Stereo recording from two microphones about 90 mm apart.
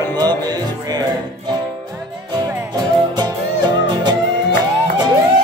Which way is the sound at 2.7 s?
50° right (ahead or behind).